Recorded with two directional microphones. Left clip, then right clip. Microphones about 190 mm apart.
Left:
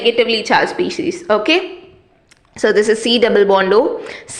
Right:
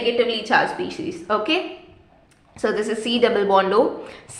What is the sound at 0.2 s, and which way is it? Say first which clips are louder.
A woman's voice: left 5 dB; 30° left (ahead or behind).